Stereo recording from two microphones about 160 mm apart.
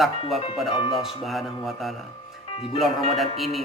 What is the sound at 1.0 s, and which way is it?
Speech, centre (ahead or behind).